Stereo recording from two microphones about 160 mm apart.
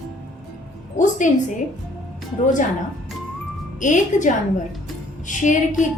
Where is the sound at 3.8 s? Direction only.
50° left (ahead or behind).